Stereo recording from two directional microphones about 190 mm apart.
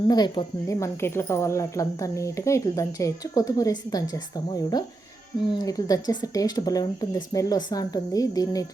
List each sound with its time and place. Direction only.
0.1 s speech: 20° left (ahead or behind)